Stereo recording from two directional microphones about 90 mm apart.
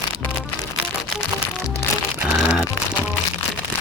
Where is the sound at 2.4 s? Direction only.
10° right (ahead or behind).